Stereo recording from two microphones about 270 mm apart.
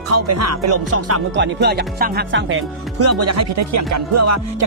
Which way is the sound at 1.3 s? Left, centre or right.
Right.